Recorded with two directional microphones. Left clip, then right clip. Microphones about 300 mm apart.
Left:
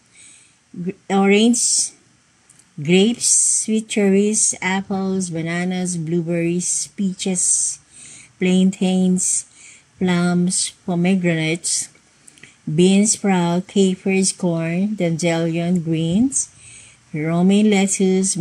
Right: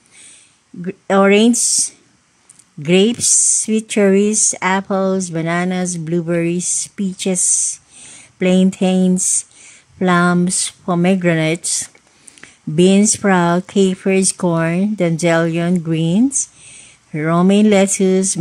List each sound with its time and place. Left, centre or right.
1.0 s speech: centre